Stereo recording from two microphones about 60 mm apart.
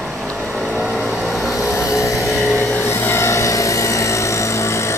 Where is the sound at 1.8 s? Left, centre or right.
Left.